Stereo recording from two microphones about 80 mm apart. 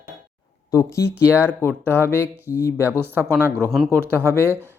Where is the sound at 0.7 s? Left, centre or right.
Left.